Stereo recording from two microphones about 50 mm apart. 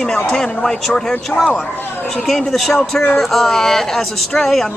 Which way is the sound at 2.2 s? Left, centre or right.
Centre.